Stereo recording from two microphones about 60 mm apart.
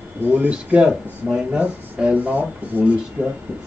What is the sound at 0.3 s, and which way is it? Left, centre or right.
Speech, right.